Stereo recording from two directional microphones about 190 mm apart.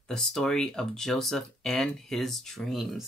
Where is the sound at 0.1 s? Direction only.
Centre (ahead or behind).